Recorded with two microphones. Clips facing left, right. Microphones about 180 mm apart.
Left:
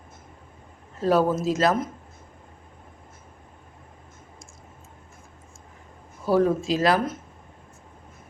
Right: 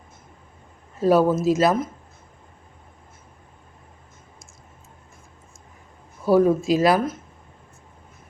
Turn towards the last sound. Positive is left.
turn(degrees=-10)  # may be behind; listen again after turning